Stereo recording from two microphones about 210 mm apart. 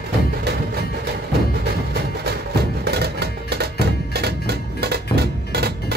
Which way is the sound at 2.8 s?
50° right (ahead or behind).